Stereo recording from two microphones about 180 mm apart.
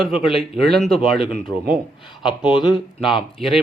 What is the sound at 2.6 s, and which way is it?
Speech, 25° left (ahead or behind).